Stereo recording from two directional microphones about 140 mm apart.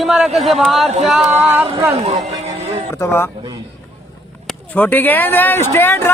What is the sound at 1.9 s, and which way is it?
Speech, 50° right (ahead or behind).